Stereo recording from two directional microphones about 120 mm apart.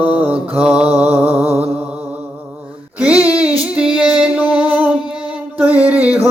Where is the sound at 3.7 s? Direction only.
10° right (ahead or behind).